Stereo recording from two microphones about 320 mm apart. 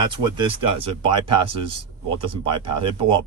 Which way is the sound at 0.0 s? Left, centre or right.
Centre.